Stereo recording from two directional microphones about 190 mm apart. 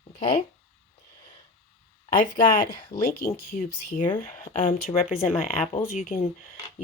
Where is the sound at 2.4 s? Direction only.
20° left (ahead or behind).